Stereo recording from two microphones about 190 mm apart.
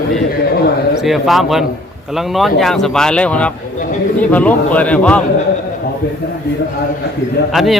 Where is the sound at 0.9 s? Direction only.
Centre (ahead or behind).